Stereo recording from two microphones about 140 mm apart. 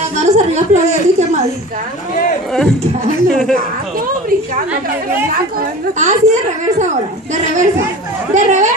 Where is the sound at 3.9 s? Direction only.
80° right; by 6.8 s 60° right (ahead or behind).